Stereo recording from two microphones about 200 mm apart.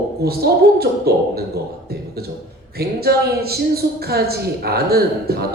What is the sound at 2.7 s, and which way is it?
A woman's voice, 50° right (ahead or behind).